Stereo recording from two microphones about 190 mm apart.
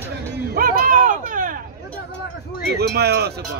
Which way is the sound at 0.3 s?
50° right (ahead or behind).